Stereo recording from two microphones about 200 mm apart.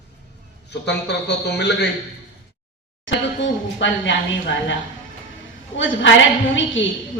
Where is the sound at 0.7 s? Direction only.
60° left (ahead or behind).